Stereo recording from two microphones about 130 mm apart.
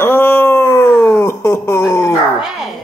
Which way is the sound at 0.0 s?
15° left (ahead or behind).